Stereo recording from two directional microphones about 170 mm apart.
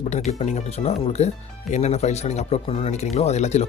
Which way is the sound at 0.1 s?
40° left (ahead or behind).